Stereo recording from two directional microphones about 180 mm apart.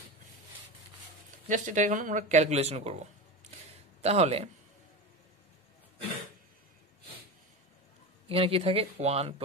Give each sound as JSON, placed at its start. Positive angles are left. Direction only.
{"t": 1.5, "sound": "speech", "side_deg": -45}
{"t": 8.3, "sound": "speech", "side_deg": -35}